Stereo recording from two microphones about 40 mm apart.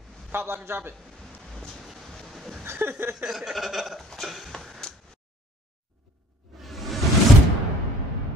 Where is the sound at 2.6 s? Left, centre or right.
Right.